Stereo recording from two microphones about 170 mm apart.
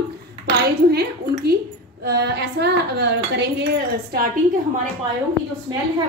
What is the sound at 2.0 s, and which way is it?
Speech, 75° right (ahead or behind).